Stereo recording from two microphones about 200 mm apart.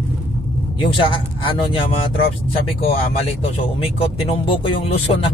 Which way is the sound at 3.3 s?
30° left (ahead or behind).